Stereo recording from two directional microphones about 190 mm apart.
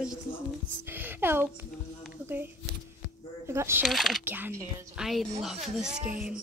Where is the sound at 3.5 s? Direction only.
15° right (ahead or behind).